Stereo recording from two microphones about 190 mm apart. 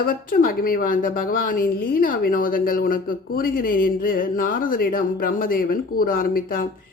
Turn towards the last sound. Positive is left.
turn(degrees=50)  # may be behind; listen again after turning